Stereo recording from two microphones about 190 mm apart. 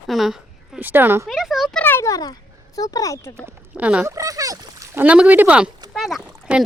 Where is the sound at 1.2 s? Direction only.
Centre (ahead or behind).